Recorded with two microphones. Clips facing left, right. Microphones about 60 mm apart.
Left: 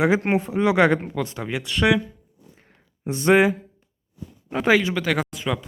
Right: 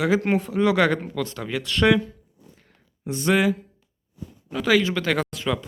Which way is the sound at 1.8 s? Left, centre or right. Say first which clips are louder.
Right 1 dB; centre.